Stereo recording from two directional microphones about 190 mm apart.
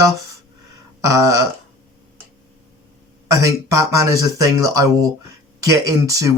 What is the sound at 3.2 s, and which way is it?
Speech, 15° right (ahead or behind).